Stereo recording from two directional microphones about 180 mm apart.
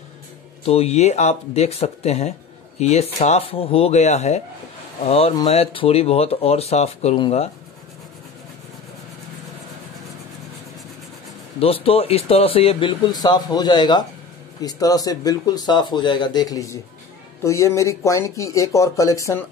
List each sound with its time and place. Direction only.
0.7 s speech: 35° left (ahead or behind)
11.6 s speech: 30° left (ahead or behind); by 19.4 s 15° left (ahead or behind)